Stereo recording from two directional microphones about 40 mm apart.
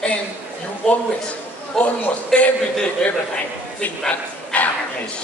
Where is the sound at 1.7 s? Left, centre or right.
Centre.